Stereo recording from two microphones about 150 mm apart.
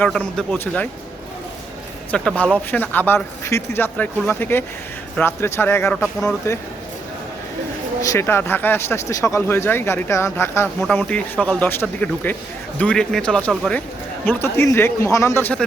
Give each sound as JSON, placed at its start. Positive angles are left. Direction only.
{"t": 0.0, "sound": "speech", "side_deg": 5}
{"t": 2.1, "sound": "speech", "side_deg": 5}
{"t": 8.0, "sound": "speech", "side_deg": 20}
{"t": 10.8, "sound": "speech", "side_deg": 5}